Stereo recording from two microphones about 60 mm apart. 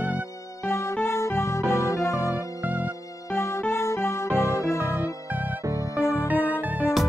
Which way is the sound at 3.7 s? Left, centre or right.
Left.